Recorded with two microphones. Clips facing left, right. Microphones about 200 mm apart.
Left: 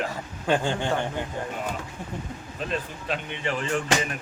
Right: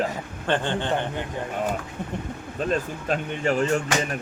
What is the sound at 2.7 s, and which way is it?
Speech, 45° right (ahead or behind).